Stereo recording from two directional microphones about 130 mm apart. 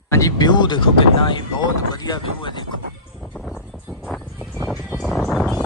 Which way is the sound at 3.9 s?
Centre (ahead or behind).